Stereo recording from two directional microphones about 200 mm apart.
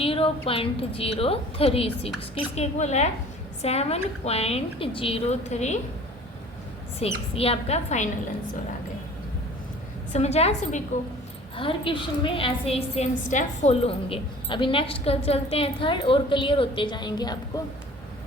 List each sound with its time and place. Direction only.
0.0 s a sound: 25° left (ahead or behind)
0.4 s a woman's voice: 30° left (ahead or behind)
7.0 s a woman's voice: 30° left (ahead or behind)
10.1 s a woman's voice: 35° left (ahead or behind)
11.5 s a woman's voice: 25° left (ahead or behind)